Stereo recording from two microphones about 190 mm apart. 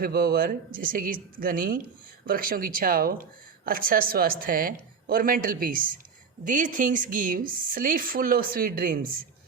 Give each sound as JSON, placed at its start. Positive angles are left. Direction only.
{"t": 0.0, "sound": "a woman's voice", "side_deg": -50}